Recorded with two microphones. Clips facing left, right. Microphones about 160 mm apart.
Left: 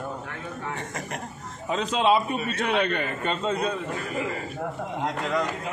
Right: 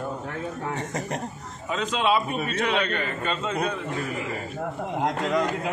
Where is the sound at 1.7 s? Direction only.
40° left (ahead or behind).